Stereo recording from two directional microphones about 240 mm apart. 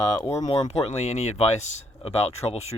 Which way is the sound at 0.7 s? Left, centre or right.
Left.